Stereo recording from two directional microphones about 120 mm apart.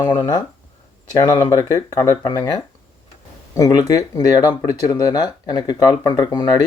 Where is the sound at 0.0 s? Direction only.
35° left (ahead or behind).